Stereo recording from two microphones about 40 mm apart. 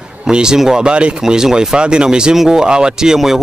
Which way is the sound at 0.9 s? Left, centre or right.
Right.